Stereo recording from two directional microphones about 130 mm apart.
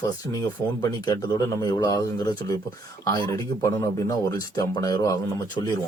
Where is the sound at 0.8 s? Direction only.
30° left (ahead or behind).